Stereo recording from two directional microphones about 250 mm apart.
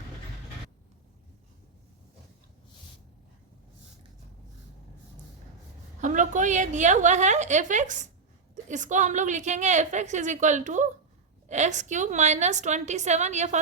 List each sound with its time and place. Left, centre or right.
6.0 s a woman's voice: right